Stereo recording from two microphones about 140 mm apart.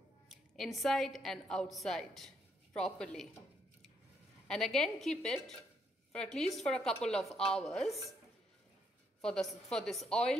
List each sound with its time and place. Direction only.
0.3 s a woman's voice: centre (ahead or behind)
4.5 s a woman's voice: centre (ahead or behind)
9.2 s a woman's voice: 5° left (ahead or behind)